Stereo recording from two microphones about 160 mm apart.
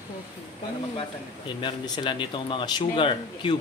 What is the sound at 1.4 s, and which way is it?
Speech, 30° left (ahead or behind).